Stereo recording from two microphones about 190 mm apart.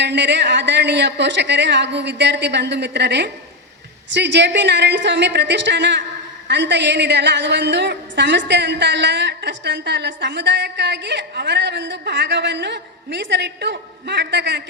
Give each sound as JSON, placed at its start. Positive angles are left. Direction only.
{"t": 0.0, "sound": "a woman's voice", "side_deg": -65}